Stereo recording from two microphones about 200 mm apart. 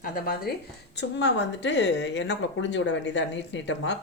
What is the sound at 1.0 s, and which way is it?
Speech, 60° left (ahead or behind).